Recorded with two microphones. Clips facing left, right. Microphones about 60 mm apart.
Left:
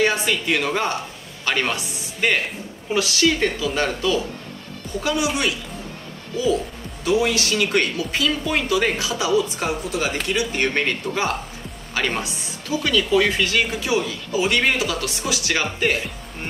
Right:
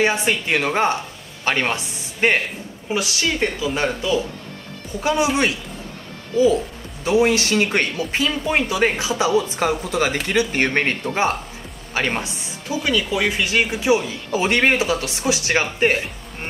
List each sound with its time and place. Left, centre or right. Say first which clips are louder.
0.0 s speech: right 1 dB; right
2.9 s speech: left 3 dB; centre
5.0 s speech: right 4 dB; right
7.1 s speech: right 3 dB; right
9.6 s speech: right 4 dB; right
14.3 s speech: right 2 dB; right
14.8 s speech: right 3 dB; right